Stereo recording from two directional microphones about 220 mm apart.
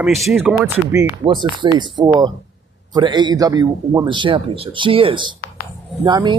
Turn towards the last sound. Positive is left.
turn(degrees=-20)  # may be behind; listen again after turning